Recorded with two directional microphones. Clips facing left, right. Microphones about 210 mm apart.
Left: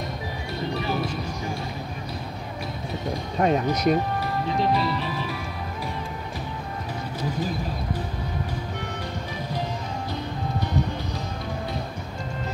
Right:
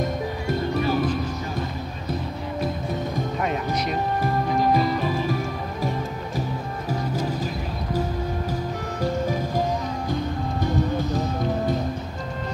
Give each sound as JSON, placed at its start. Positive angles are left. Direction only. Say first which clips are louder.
{"t": 0.0, "sound": "music", "louder": "right 6 dB", "side_deg": -50}
{"t": 3.3, "sound": "speech", "louder": "left 7 dB", "side_deg": 40}
{"t": 4.2, "sound": "music", "louder": "right 3 dB", "side_deg": -45}
{"t": 9.0, "sound": "music", "louder": "right 8 dB", "side_deg": -45}